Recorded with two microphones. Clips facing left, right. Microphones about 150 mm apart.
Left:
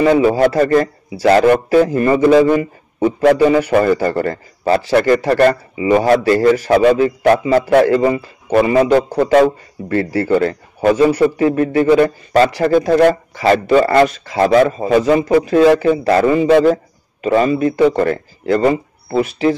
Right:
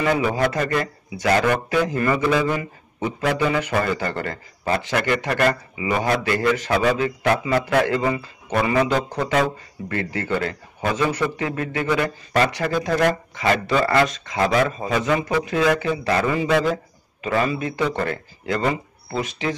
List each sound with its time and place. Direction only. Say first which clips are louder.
0.0 s speech: left 9 dB; 30° left (ahead or behind)
16.6 s a sound: left 10 dB; 40° left (ahead or behind)
17.3 s speech: left 9 dB; 35° left (ahead or behind)